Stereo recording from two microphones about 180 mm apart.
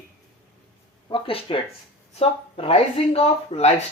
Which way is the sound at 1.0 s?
30° left (ahead or behind).